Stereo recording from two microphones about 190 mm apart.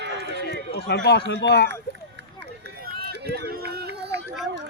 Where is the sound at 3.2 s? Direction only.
55° right (ahead or behind).